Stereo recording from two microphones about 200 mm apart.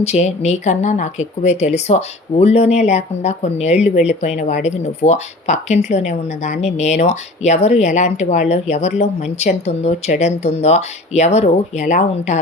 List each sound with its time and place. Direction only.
0.0 s speech: 35° left (ahead or behind)